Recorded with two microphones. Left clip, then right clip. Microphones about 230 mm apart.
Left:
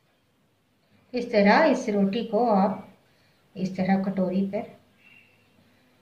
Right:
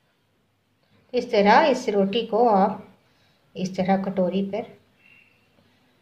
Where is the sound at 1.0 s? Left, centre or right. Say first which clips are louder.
Right 3 dB; right.